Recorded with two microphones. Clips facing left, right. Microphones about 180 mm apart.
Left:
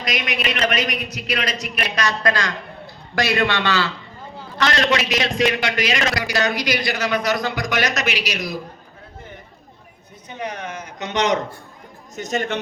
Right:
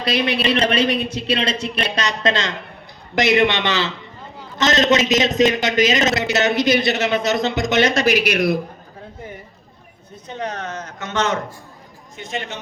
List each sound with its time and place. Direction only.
0.0 s a man's voice: 30° right (ahead or behind)
8.0 s speech: 50° right (ahead or behind)
10.2 s a man's voice: 10° left (ahead or behind)
12.1 s a man's voice: 45° left (ahead or behind)